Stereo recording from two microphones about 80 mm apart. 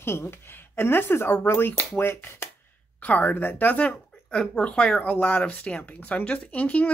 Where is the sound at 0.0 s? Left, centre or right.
Left.